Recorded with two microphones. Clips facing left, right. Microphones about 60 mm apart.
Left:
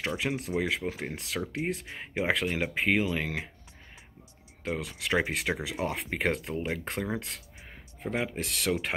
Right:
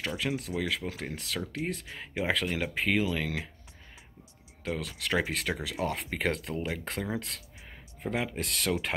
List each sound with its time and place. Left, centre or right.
0.2 s speech: centre
0.6 s speech: centre
4.7 s speech: centre
7.2 s a sound: centre
8.3 s speech: centre